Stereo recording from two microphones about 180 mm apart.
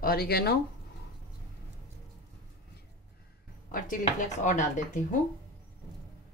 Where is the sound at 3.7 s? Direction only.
45° left (ahead or behind).